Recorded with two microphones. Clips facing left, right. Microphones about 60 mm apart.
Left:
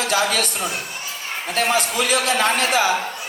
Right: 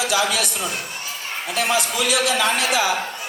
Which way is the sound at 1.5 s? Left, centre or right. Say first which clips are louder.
Left 1 dB; left.